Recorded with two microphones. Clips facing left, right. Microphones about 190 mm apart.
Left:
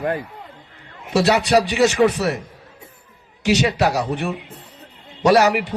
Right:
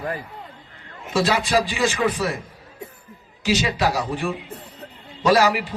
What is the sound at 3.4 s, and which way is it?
Speech, 70° left (ahead or behind).